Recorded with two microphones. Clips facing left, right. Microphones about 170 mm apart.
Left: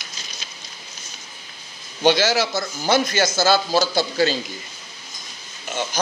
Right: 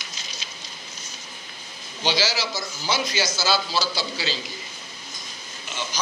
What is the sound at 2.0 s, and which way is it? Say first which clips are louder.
Speech: left 8 dB; 55° left (ahead or behind).